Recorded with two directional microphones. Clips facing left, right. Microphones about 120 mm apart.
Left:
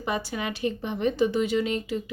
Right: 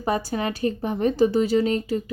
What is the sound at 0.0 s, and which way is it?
Speech, 40° right (ahead or behind).